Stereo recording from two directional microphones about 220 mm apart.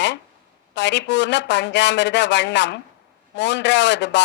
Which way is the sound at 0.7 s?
55° left (ahead or behind).